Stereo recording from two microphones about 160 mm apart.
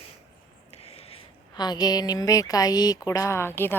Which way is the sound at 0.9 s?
30° left (ahead or behind).